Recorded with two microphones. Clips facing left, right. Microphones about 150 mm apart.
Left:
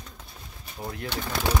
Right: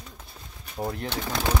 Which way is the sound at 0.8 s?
35° right (ahead or behind).